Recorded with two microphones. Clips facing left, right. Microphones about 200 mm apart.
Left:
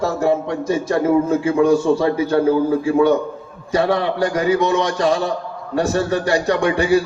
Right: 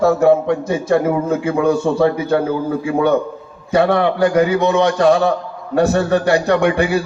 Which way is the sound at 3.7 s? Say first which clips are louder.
Right 3 dB; 60° right (ahead or behind).